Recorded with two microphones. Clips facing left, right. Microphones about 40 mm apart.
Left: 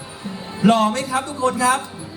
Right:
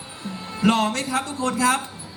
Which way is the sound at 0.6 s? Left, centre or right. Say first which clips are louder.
Left 4 dB; left.